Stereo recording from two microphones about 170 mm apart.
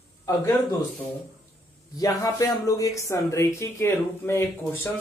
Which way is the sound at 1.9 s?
20° left (ahead or behind).